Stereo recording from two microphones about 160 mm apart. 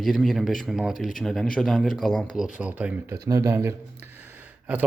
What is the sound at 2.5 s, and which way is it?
Speech, 10° right (ahead or behind).